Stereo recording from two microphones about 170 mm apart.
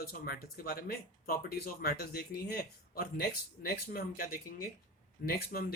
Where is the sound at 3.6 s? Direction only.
60° left (ahead or behind).